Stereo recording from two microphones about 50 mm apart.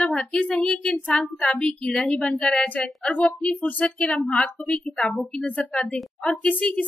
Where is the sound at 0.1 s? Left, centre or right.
Centre.